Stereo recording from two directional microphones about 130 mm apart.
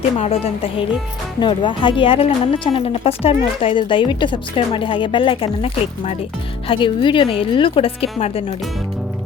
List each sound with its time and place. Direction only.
0.2 s a woman's voice: 50° left (ahead or behind)